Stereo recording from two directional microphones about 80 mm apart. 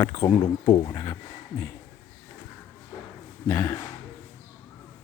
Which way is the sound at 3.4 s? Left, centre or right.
Left.